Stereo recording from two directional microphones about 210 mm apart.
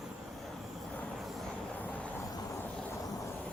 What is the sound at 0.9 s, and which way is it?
Vehicle, 5° left (ahead or behind).